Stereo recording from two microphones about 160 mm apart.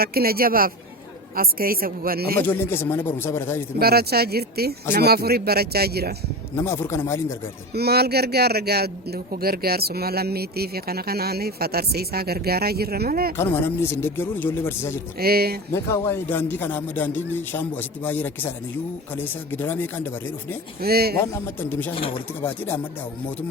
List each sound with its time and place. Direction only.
0.0 s a man's voice: 70° right (ahead or behind)
2.4 s speech: 15° left (ahead or behind)
3.8 s a man's voice: 75° right (ahead or behind)
6.6 s speech: 15° left (ahead or behind)
7.7 s a man's voice: 85° right
13.3 s speech: 15° left (ahead or behind)
15.2 s a man's voice: 75° right (ahead or behind)
15.7 s speech: 15° left (ahead or behind)
20.8 s a man's voice: 75° right (ahead or behind)
21.6 s speech: 10° left (ahead or behind)
21.9 s speech: 35° left (ahead or behind)
22.4 s speech: 10° left (ahead or behind)